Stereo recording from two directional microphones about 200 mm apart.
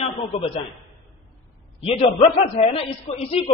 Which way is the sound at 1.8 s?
30° left (ahead or behind).